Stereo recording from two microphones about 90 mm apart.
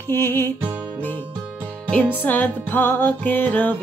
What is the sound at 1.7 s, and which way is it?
Music, 15° left (ahead or behind).